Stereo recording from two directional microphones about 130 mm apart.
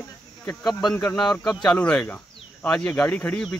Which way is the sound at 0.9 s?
5° left (ahead or behind).